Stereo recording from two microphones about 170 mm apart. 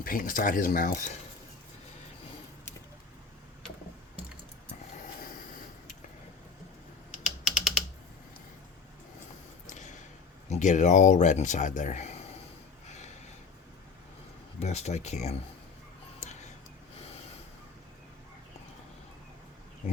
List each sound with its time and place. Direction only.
0.0 s speech: 55° left (ahead or behind)
7.4 s typing: centre (ahead or behind)
9.6 s a sound: 45° left (ahead or behind)
10.5 s speech: 45° left (ahead or behind)
14.6 s speech: 40° left (ahead or behind)
16.2 s a sound: 45° left (ahead or behind)